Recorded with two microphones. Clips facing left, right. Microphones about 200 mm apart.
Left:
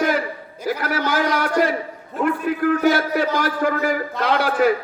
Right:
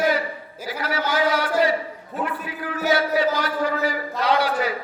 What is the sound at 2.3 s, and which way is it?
A man's voice, 50° left (ahead or behind).